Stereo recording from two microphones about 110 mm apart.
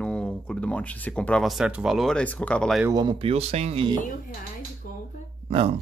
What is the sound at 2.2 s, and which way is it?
Speech, 10° left (ahead or behind).